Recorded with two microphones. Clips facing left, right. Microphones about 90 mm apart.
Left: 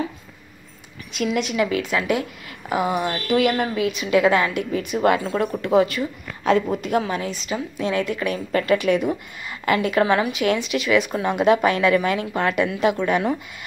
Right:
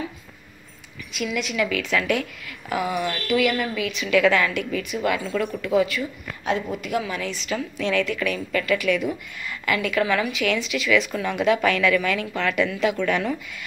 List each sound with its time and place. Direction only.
1.1 s a woman's voice: 40° left (ahead or behind)
1.4 s a woman's voice: 25° left (ahead or behind)
6.4 s a woman's voice: 40° left (ahead or behind)